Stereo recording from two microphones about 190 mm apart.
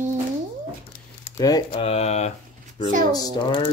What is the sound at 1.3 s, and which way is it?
Speech, 20° left (ahead or behind).